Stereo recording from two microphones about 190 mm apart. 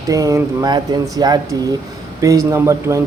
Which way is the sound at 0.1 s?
15° right (ahead or behind).